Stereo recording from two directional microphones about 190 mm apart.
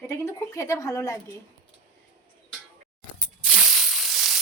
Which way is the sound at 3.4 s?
Centre (ahead or behind).